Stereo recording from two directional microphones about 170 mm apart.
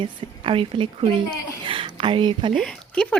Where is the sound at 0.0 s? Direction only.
30° right (ahead or behind).